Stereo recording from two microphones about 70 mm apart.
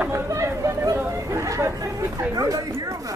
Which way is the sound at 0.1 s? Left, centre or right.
Right.